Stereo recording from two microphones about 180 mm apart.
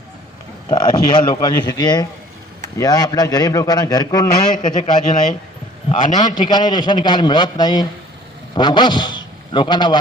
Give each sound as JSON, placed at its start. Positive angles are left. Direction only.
{"t": 0.7, "sound": "a man's voice", "side_deg": 20}
{"t": 5.0, "sound": "speech", "side_deg": 45}
{"t": 6.1, "sound": "a man's voice", "side_deg": 25}